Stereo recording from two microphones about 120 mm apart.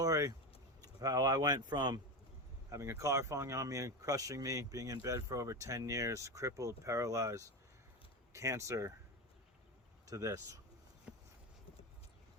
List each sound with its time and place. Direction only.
0.0 s vehicle: 30° right (ahead or behind)
0.8 s speech: 30° right (ahead or behind)
2.6 s speech: 25° right (ahead or behind)
10.1 s speech: 30° right (ahead or behind)
11.1 s a sound: 10° right (ahead or behind)